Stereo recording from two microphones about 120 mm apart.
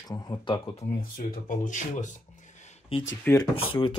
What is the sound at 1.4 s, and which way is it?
Speech, 90° left.